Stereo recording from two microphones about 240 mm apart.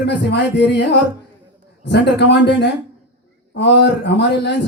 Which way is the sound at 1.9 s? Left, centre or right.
Left.